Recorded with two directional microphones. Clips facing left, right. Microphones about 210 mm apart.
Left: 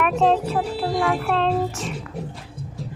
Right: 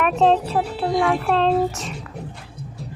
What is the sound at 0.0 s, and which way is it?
Speech, 35° right (ahead or behind).